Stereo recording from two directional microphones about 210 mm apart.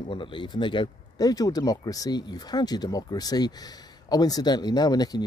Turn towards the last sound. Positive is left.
turn(degrees=20)  # may be behind; listen again after turning